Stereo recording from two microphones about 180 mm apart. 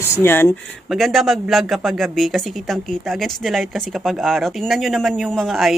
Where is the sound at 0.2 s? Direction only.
15° left (ahead or behind).